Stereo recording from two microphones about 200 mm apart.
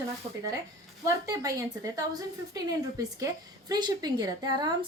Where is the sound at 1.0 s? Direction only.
15° right (ahead or behind).